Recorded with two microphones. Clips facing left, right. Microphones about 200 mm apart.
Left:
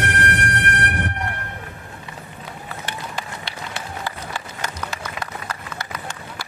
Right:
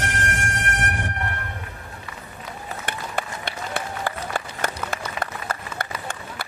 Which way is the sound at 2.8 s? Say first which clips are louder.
Right 3 dB; 55° right (ahead or behind).